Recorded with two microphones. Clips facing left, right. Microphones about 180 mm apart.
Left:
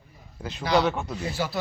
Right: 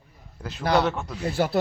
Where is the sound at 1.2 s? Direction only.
55° right (ahead or behind).